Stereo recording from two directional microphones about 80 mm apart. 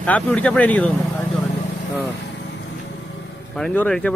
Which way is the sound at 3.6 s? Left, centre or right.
Centre.